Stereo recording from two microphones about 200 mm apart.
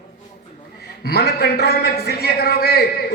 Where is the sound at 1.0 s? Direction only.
50° left (ahead or behind).